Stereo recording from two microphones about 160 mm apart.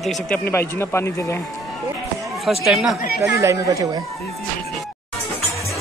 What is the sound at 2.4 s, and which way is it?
Speech, centre (ahead or behind).